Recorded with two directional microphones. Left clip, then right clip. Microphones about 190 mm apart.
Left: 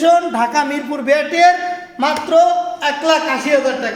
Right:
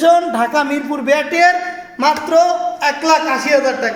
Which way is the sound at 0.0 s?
35° right (ahead or behind).